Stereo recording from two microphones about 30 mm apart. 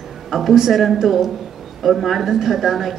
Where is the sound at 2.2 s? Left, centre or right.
Centre.